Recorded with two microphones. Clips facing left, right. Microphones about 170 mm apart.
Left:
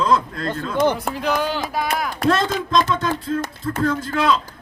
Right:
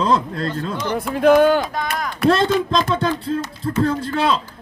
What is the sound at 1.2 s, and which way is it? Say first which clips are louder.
Speech: right 10 dB; 50° right (ahead or behind).